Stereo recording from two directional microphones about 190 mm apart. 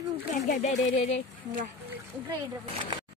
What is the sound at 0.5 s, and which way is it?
Speech, 35° left (ahead or behind).